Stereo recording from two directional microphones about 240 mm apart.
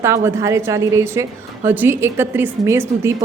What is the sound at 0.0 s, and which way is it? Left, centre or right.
A woman's voice, centre.